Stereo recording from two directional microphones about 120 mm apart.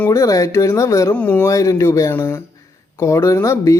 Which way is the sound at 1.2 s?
15° left (ahead or behind).